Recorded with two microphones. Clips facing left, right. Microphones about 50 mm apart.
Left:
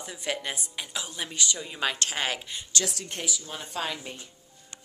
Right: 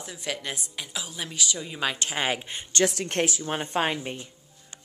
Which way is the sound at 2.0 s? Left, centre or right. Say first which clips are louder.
Right 2 dB; centre.